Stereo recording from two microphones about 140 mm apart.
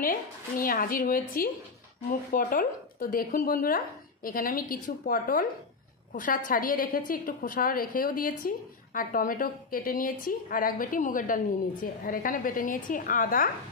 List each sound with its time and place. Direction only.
0.0 s speech: 90° left
2.0 s speech: 80° left
6.1 s a woman's voice: 75° left (ahead or behind)